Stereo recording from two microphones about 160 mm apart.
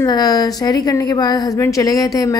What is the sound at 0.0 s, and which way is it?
A woman's voice, 25° left (ahead or behind).